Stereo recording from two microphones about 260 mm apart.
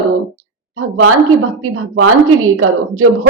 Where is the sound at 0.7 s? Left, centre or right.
Right.